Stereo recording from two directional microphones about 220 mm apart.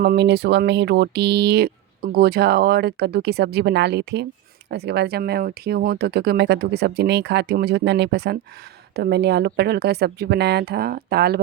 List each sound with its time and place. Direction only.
0.0 s speech: 45° right (ahead or behind)